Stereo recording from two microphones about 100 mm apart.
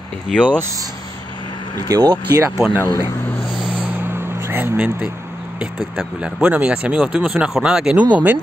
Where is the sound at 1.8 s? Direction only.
40° right (ahead or behind).